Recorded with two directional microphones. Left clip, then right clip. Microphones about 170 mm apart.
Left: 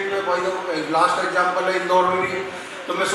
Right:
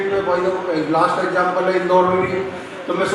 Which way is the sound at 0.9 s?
10° right (ahead or behind).